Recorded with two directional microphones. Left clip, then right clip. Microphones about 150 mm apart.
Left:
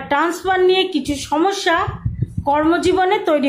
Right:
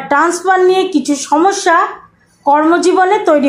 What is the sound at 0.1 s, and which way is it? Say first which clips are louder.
A woman's voice: right 6 dB; 15° right (ahead or behind).